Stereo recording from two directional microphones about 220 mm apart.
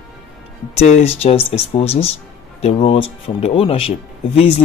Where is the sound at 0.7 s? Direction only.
30° left (ahead or behind).